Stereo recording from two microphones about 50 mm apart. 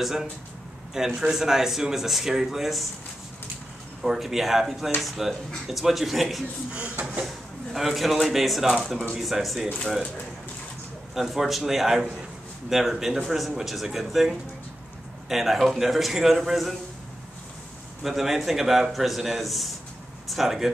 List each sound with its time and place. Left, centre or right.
0.0 s speech: centre
4.0 s a man's voice: centre
6.7 s speech: right
7.2 s a man's voice: centre
11.1 s a man's voice: centre
18.0 s a man's voice: centre